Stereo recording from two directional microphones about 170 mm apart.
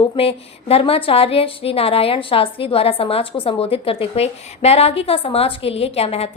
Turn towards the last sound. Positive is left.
turn(degrees=35)  # may be behind; listen again after turning